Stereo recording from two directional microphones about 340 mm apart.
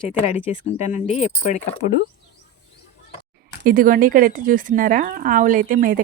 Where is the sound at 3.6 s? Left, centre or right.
Right.